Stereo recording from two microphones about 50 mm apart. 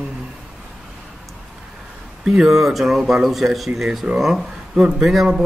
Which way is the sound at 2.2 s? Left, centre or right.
Centre.